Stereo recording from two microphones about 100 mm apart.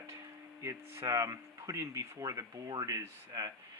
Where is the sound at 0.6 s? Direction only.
25° right (ahead or behind).